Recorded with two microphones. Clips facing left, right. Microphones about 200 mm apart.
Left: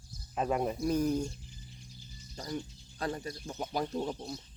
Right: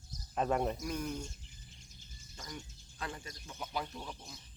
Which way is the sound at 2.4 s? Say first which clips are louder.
Left 10 dB; 40° left (ahead or behind).